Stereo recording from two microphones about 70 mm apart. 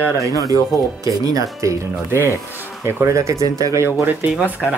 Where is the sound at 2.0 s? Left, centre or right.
Right.